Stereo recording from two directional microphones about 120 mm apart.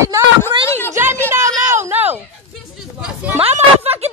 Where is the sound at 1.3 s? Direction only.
20° right (ahead or behind).